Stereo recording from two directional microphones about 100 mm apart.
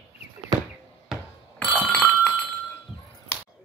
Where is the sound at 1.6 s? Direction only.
20° right (ahead or behind).